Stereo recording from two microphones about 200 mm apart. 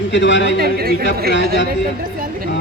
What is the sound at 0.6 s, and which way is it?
Speech, 50° right (ahead or behind).